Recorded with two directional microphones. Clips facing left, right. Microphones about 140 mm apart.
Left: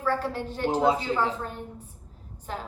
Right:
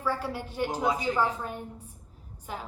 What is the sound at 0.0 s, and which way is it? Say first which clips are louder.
A woman's voice: left 3 dB; 10° right (ahead or behind).